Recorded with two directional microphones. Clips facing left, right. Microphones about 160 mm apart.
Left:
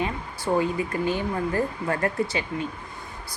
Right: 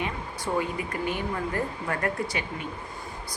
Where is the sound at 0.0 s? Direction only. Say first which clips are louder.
Left 3 dB; 30° left (ahead or behind).